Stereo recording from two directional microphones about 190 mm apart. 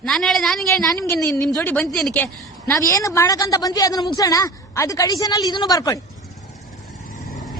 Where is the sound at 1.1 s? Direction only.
15° left (ahead or behind).